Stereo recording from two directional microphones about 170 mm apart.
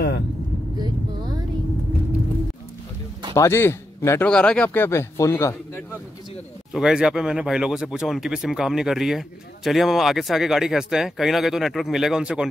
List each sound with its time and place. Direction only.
0.7 s vehicle: 25° right (ahead or behind)
3.3 s a man's voice: 15° left (ahead or behind)
6.7 s speech: 5° right (ahead or behind)